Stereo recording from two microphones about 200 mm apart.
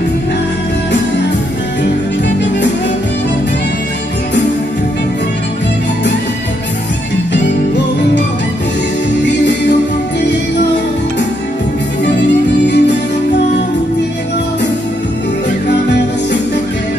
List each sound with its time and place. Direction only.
12.2 s music: 60° left (ahead or behind)